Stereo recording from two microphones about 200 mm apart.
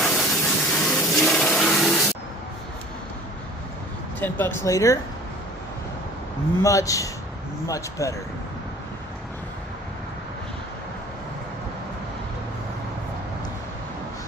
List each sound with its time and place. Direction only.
0.0 s a sound: centre (ahead or behind)
4.2 s speech: 10° left (ahead or behind)
6.6 s speech: 15° left (ahead or behind)